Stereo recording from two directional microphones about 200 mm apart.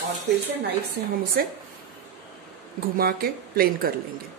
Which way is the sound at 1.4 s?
50° right (ahead or behind).